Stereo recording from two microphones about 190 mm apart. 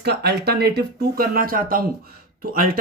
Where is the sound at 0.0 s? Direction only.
60° right (ahead or behind).